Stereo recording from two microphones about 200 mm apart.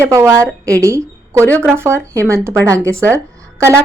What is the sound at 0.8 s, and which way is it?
A woman's voice, 15° right (ahead or behind).